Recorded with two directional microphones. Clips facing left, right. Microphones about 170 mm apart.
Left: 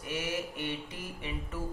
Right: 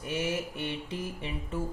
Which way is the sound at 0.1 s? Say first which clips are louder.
Right 3 dB; 30° right (ahead or behind).